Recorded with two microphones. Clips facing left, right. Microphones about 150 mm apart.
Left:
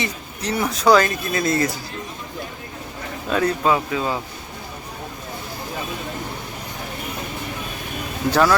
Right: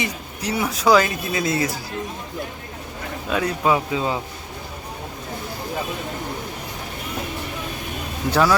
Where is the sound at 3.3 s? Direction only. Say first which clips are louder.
Left 1 dB; 10° right (ahead or behind).